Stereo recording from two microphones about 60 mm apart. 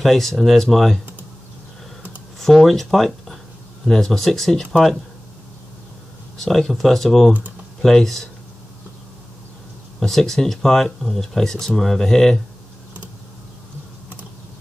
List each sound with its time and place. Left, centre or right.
0.0 s speech: centre
2.4 s speech: centre
6.3 s speech: centre
9.9 s speech: centre